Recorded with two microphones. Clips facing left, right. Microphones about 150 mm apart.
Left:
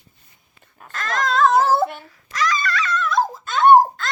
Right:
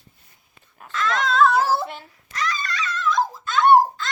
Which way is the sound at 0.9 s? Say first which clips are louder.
Even; 45° left (ahead or behind).